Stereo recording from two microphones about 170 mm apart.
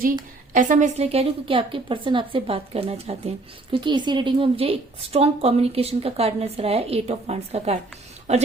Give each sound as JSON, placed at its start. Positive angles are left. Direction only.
{"t": 0.5, "sound": "a woman's voice", "side_deg": -50}